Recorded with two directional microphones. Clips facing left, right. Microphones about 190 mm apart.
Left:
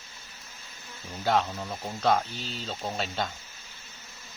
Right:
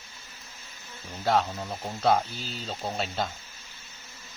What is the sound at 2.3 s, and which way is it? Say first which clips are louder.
Speech: left 1 dB; 40° right (ahead or behind).